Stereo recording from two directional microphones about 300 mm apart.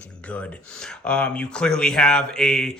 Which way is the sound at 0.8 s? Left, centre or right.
Centre.